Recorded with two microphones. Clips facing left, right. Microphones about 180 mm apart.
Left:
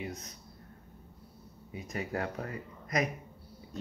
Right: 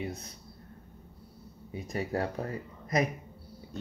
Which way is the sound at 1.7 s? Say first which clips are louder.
Right 3 dB; 30° right (ahead or behind).